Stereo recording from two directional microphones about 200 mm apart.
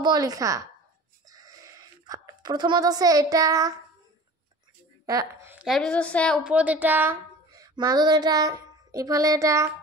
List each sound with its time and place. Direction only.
0.0 s a woman's voice: 20° right (ahead or behind)
1.3 s a sound: 15° right (ahead or behind)
5.0 s a woman's voice: 15° right (ahead or behind)